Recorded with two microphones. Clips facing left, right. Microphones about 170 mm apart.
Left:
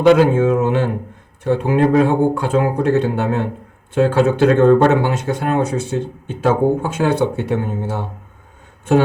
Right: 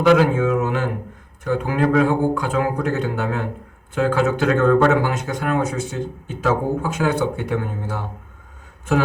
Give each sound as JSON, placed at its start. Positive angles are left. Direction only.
{"t": 0.0, "sound": "speech", "side_deg": 25}